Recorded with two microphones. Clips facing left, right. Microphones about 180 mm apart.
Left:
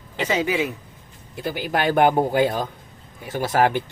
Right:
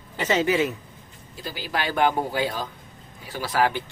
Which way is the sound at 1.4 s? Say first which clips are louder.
Left 6 dB; 60° left (ahead or behind).